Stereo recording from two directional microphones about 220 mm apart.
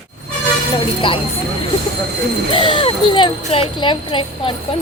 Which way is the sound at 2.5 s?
25° left (ahead or behind).